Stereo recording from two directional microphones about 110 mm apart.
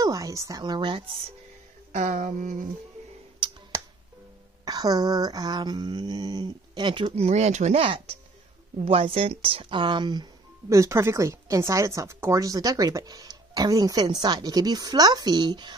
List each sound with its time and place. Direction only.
0.0 s speech: 30° right (ahead or behind)
1.9 s a sound: 90° right
4.6 s speech: 35° right (ahead or behind)
7.2 s speech: 90° right
7.8 s speech: 50° right (ahead or behind)
10.7 s speech: 25° right (ahead or behind); by 15.7 s 40° right (ahead or behind)